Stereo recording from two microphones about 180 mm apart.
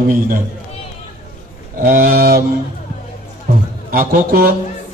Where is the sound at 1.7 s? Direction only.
55° right (ahead or behind).